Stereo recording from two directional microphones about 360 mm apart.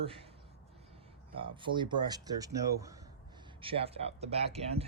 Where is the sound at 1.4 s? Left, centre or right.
Centre.